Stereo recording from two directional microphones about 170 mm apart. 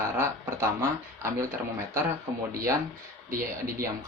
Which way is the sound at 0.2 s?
15° right (ahead or behind).